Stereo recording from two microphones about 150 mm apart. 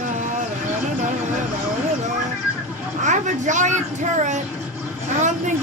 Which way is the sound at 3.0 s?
55° right (ahead or behind).